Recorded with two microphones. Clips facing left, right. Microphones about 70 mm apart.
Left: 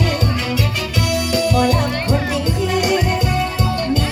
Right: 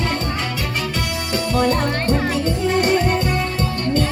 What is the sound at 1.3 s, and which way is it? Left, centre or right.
Music, right.